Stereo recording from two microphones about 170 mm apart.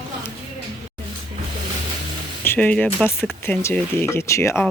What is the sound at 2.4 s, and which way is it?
Speech, 10° left (ahead or behind).